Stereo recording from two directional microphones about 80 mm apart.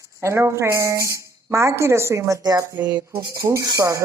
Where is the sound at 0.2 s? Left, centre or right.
Right.